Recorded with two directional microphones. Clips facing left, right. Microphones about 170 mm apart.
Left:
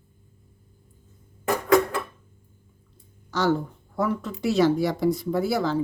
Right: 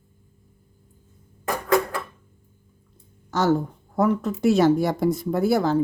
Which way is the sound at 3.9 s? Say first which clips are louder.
Right 5 dB; 45° right (ahead or behind).